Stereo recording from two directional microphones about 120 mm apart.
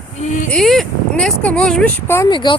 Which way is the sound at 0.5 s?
Centre (ahead or behind).